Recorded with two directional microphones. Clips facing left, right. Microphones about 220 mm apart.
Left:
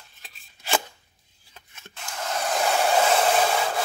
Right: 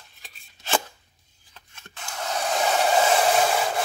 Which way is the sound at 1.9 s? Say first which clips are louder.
Even; 5° right (ahead or behind).